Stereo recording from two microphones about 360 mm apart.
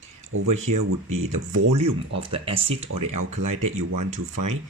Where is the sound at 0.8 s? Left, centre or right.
Right.